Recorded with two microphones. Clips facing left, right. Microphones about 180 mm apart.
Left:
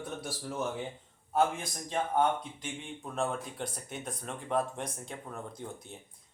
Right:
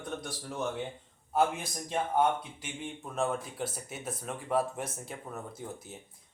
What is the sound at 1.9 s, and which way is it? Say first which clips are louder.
Speech: right 1 dB; 5° right (ahead or behind).